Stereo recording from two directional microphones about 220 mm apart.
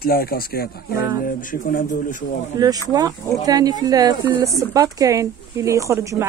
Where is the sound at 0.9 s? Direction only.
15° right (ahead or behind).